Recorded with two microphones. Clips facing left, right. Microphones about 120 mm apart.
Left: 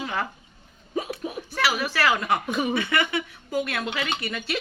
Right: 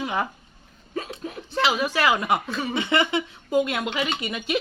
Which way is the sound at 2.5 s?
15° left (ahead or behind).